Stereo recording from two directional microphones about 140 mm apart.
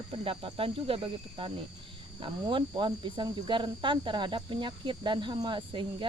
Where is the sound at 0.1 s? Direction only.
40° right (ahead or behind).